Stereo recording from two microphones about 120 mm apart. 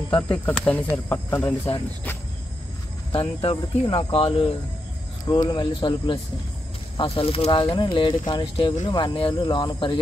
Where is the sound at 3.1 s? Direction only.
50° left (ahead or behind).